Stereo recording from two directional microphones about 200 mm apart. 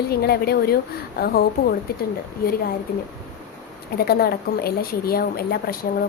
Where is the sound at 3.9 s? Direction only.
50° left (ahead or behind).